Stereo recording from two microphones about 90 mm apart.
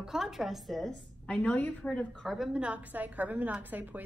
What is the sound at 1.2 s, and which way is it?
A woman's voice, 10° left (ahead or behind).